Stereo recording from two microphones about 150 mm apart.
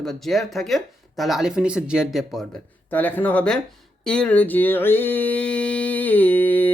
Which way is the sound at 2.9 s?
10° left (ahead or behind).